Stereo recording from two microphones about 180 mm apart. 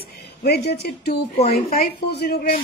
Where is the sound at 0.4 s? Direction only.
60° left (ahead or behind).